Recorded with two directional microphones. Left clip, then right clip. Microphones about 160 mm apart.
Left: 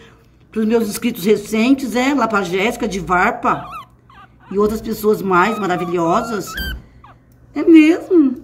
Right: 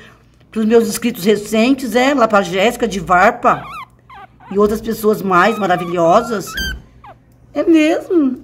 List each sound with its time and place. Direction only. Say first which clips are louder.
0.0 s a woman's voice: right 3 dB; 50° right (ahead or behind)
3.5 s dog: right 1 dB; 30° right (ahead or behind)
4.6 s a woman's voice: right 3 dB; 45° right (ahead or behind)
6.5 s a sound: right 4 dB; 30° right (ahead or behind)